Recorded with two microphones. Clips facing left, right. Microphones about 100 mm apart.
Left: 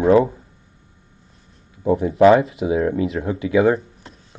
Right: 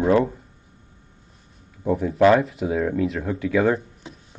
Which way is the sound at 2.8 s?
5° left (ahead or behind).